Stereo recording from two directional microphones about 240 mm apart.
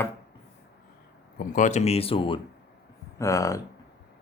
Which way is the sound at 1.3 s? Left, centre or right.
Left.